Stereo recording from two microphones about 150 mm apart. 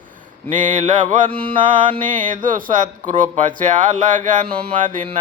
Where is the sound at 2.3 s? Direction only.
65° right (ahead or behind).